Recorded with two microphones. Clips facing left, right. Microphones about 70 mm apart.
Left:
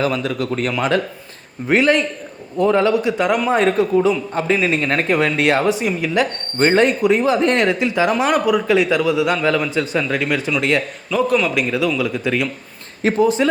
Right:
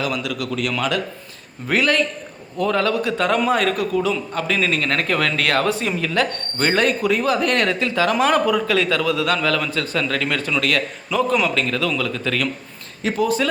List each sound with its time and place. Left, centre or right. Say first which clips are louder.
0.0 s speech: left 4 dB; left
1.6 s a man's voice: left 4 dB; left
3.5 s a man's voice: left 4 dB; left
6.6 s a man's voice: left 4 dB; left
11.1 s a man's voice: left 2 dB; centre
13.0 s speech: left 5 dB; left
13.2 s a man's voice: left 3 dB; left